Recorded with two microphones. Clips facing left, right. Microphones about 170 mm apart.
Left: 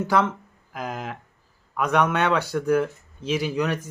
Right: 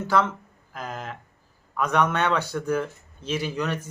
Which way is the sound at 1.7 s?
10° left (ahead or behind).